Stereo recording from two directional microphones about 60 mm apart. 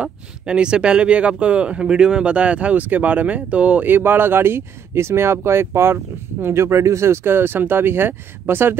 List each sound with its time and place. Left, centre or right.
0.0 s speech: centre; by 8.7 s right